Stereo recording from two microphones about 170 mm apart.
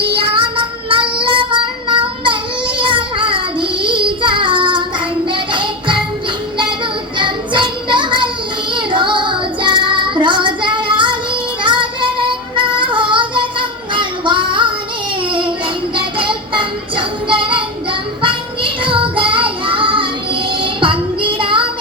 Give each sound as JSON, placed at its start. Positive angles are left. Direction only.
{"t": 0.2, "sound": "child singing", "side_deg": -30}
{"t": 7.2, "sound": "child singing", "side_deg": -30}
{"t": 16.0, "sound": "music", "side_deg": -30}
{"t": 18.2, "sound": "child singing", "side_deg": -30}
{"t": 20.5, "sound": "music", "side_deg": -30}